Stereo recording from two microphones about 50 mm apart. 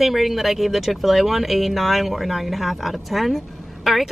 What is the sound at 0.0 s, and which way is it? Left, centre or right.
Speech, centre.